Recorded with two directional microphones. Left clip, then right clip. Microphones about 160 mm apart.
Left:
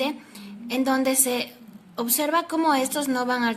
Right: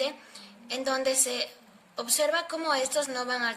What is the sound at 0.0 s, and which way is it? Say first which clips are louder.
A woman's voice: left 4 dB; 40° left (ahead or behind).